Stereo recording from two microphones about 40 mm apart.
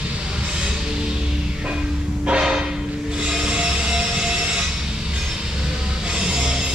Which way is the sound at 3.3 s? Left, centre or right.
Right.